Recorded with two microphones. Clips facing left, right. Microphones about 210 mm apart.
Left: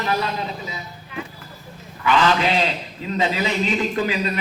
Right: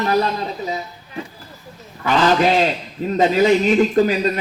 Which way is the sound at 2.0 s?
45° right (ahead or behind).